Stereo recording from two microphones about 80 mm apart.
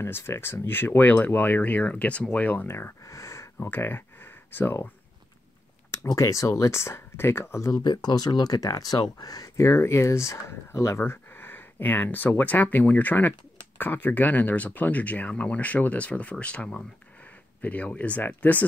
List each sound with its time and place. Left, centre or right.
0.0 s speech: left
2.7 s speech: left
3.6 s speech: left
6.0 s speech: left
7.7 s speech: left